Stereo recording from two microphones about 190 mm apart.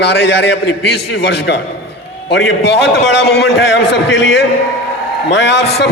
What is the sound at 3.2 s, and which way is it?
A man's voice, 60° left (ahead or behind).